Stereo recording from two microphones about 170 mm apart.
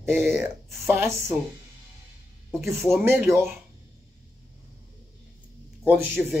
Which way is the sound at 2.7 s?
Centre (ahead or behind).